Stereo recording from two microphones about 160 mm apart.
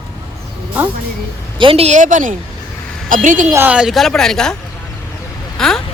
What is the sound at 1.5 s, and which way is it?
A woman's voice, 35° right (ahead or behind).